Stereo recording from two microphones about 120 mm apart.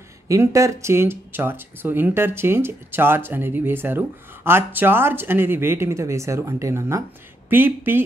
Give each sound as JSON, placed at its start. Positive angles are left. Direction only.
{"t": 0.3, "sound": "speech", "side_deg": -25}